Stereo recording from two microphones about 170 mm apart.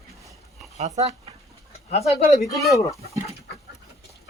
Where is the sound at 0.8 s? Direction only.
40° right (ahead or behind).